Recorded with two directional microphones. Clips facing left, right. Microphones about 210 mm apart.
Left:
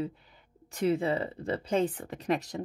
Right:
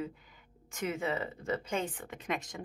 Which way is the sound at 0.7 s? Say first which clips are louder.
Left 7 dB; 35° left (ahead or behind).